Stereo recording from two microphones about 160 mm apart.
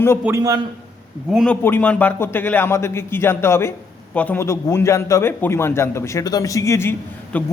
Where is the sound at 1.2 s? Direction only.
Centre (ahead or behind).